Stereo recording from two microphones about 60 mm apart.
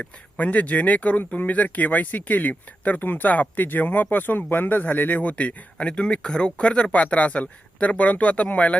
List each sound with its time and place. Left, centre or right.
0.0 s speech: left